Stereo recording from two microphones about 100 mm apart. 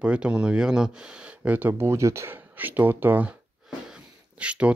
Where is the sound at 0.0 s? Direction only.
10° right (ahead or behind).